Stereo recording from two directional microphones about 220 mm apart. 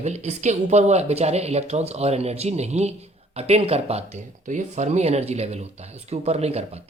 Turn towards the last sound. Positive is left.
turn(degrees=-30)  # may be behind; listen again after turning